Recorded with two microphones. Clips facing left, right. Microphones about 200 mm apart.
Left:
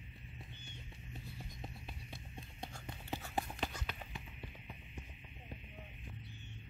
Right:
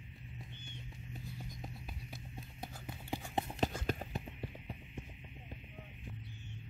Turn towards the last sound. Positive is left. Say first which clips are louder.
# right 6 dB
turn(degrees=-35)  # may be behind; listen again after turning